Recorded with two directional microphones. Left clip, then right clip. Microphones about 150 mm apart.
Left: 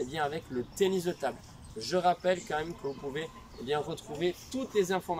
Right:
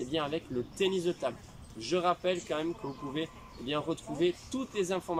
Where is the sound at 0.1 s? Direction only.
15° right (ahead or behind).